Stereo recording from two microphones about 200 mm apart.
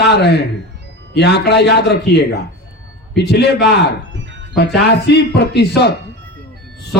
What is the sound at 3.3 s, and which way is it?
A man's voice, 55° left (ahead or behind).